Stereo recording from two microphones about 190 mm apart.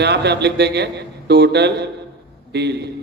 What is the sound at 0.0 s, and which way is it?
A man's voice, 65° right (ahead or behind).